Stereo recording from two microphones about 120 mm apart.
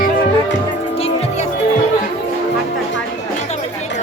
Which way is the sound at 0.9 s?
60° left (ahead or behind).